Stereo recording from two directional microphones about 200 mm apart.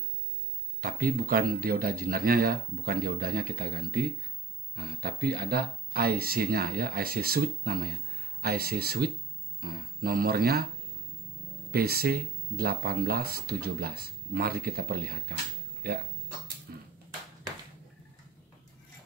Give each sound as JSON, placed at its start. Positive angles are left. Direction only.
{"t": 0.7, "sound": "speech", "side_deg": -45}
{"t": 11.7, "sound": "speech", "side_deg": -50}
{"t": 16.7, "sound": "a sound", "side_deg": -50}